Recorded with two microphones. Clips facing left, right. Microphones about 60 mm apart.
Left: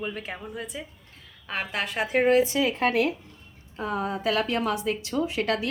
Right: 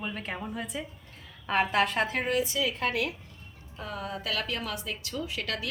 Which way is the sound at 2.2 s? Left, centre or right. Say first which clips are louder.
Left 7 dB; left.